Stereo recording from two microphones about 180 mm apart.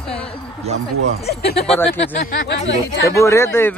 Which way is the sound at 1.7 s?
10° left (ahead or behind).